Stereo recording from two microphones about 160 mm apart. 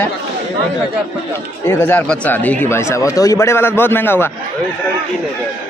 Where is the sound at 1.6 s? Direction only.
10° left (ahead or behind).